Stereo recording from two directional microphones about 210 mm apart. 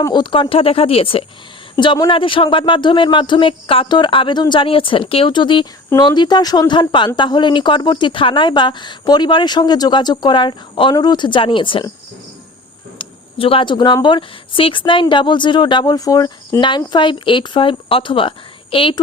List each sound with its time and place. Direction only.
0.0 s a woman's voice: 20° left (ahead or behind)
13.0 s a woman's voice: 25° left (ahead or behind)